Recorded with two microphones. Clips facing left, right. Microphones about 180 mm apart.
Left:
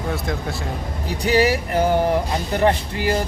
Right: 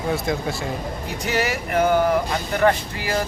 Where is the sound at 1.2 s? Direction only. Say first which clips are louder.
Left 7 dB; 35° left (ahead or behind).